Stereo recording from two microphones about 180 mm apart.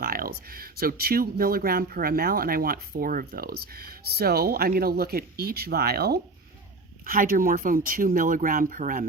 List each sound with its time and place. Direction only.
0.0 s speech: 55° right (ahead or behind)